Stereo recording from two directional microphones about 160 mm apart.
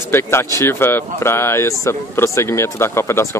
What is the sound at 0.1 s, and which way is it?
Speech, 15° left (ahead or behind).